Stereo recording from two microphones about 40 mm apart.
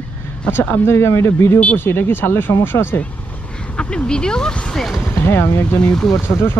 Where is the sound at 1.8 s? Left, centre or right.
Left.